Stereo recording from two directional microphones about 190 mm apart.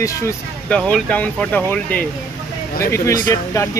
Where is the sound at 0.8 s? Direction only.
5° left (ahead or behind).